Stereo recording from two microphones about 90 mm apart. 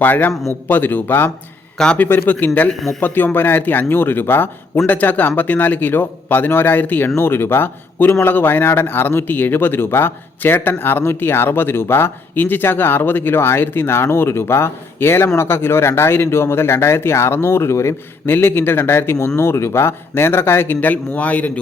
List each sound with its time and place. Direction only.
0.0 s speech: 20° left (ahead or behind)
1.8 s a man's voice: 10° left (ahead or behind)
2.0 s speech: 25° left (ahead or behind)